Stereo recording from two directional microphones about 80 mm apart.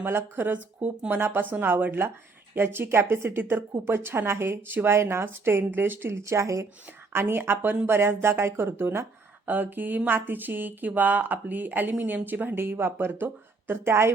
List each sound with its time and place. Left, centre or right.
0.0 s speech: right
6.8 s speech: right